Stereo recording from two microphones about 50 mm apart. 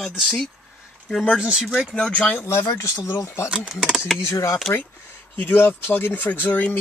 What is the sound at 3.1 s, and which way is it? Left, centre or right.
Speech, left.